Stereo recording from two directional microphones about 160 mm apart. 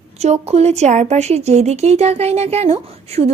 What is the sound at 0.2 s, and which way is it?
Speech, 40° right (ahead or behind).